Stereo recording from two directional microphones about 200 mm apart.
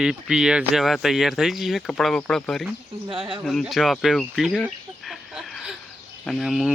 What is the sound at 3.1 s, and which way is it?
Speech, 25° right (ahead or behind).